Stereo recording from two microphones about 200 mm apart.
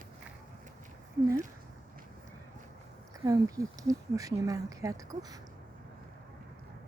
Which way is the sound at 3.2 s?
15° right (ahead or behind).